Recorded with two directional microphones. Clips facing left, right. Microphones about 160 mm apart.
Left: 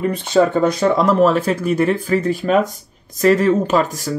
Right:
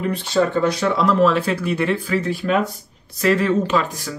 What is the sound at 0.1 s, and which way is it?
Speech, 50° left (ahead or behind).